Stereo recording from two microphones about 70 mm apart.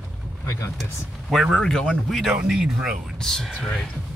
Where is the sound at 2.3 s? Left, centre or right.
Centre.